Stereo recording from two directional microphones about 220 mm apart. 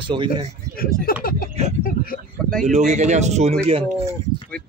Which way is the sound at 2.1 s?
40° left (ahead or behind).